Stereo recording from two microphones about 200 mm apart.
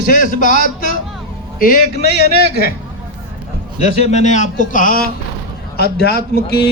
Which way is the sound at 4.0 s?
35° left (ahead or behind).